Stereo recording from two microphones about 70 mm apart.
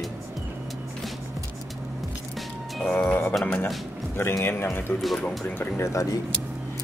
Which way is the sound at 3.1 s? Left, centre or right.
Left.